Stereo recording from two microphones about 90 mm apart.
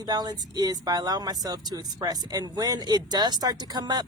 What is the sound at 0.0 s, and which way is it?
Speech, 50° right (ahead or behind).